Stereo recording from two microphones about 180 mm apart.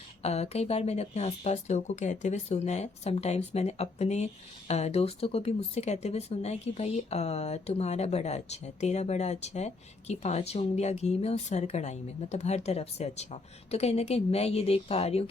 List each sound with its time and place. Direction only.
0.2 s speech: 35° left (ahead or behind)